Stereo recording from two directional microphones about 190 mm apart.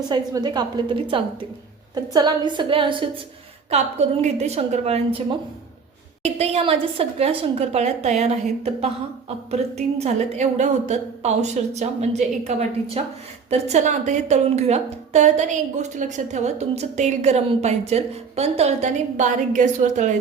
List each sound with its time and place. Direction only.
0.0 s a woman's voice: 20° right (ahead or behind); by 20.1 s 40° right (ahead or behind)